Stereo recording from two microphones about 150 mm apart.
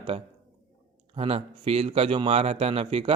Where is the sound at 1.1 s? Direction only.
40° right (ahead or behind).